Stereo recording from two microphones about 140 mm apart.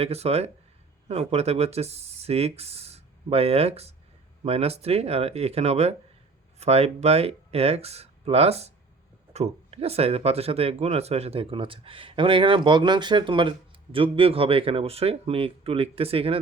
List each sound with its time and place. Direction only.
0.0 s speech: 50° right (ahead or behind)